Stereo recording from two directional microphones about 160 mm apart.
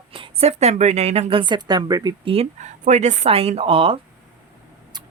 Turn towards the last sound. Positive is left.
turn(degrees=-35)  # may be behind; listen again after turning